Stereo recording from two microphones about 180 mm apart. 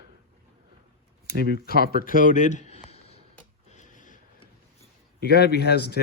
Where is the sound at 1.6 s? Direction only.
55° left (ahead or behind); by 3.2 s 35° left (ahead or behind).